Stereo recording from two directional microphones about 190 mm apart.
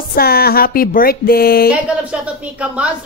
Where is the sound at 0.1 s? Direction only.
55° left (ahead or behind).